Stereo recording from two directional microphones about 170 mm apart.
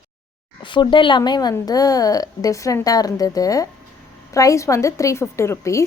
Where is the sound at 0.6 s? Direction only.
30° left (ahead or behind).